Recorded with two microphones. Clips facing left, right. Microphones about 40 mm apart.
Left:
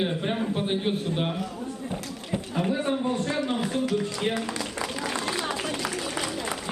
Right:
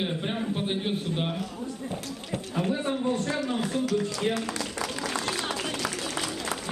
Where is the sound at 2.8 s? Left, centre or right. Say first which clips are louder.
Left 1 dB; left.